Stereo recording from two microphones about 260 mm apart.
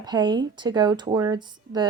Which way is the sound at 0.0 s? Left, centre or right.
Centre.